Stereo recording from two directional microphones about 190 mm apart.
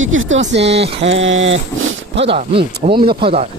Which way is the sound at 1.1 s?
85° right.